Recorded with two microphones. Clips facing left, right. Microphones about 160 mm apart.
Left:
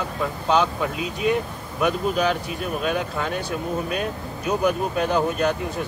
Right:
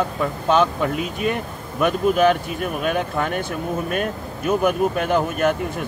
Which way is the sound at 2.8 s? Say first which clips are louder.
Right 3 dB; 55° right (ahead or behind).